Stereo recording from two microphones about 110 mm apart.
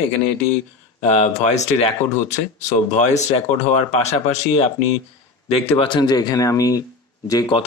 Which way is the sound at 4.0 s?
80° left.